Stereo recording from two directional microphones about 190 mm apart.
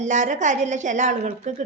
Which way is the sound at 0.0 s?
40° right (ahead or behind).